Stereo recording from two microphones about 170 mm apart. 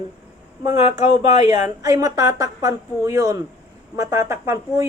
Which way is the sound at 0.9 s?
40° left (ahead or behind).